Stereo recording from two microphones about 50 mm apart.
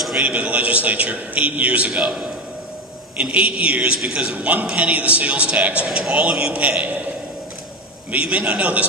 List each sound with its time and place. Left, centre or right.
0.2 s a man's voice: right
2.0 s a man's voice: centre
3.2 s speech: right
5.9 s speech: centre; by 7.0 s right
8.3 s speech: centre